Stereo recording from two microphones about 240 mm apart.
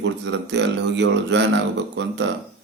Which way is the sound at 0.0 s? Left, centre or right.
Right.